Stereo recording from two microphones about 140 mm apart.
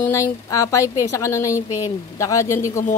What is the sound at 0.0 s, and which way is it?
Speech, 20° left (ahead or behind).